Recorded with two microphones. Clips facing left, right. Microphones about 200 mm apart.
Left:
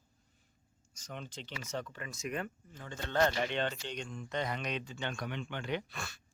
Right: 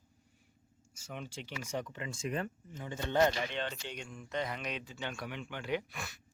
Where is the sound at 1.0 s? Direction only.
10° right (ahead or behind); by 2.4 s 30° right (ahead or behind).